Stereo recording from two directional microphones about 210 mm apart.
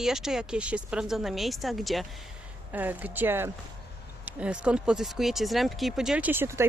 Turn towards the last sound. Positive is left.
turn(degrees=-10)  # may be behind; listen again after turning